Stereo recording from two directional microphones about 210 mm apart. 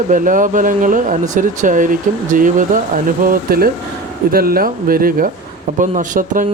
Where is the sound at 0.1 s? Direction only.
40° right (ahead or behind).